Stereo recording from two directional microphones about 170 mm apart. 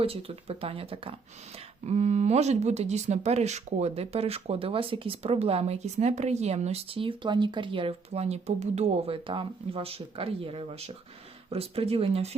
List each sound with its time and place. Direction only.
0.0 s speech: 35° right (ahead or behind)